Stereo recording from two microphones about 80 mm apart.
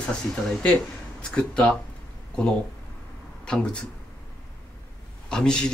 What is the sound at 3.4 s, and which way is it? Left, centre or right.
Speech, centre.